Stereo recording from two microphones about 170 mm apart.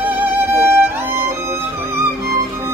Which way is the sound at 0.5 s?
15° right (ahead or behind).